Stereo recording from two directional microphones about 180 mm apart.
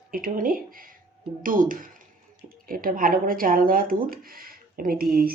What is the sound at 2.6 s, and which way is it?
Speech, 50° right (ahead or behind).